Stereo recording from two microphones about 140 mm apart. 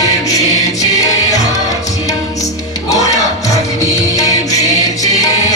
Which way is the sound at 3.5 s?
25° left (ahead or behind).